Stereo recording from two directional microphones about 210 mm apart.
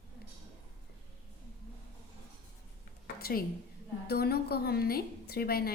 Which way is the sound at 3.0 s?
45° left (ahead or behind).